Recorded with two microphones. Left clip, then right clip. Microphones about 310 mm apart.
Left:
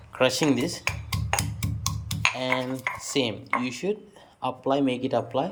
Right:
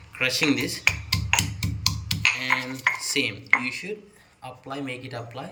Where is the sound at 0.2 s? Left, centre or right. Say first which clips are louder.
Left 1 dB; centre.